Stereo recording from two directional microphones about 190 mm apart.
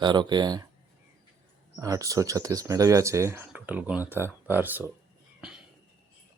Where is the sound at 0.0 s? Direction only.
25° right (ahead or behind).